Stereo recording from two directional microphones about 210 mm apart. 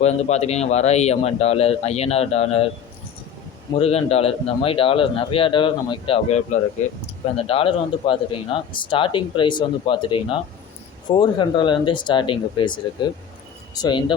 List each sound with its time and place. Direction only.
0.0 s speech: 30° left (ahead or behind)
3.8 s speech: 30° left (ahead or behind)